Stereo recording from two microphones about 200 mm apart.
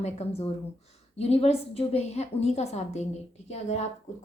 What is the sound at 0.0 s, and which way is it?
A woman's voice, 30° left (ahead or behind).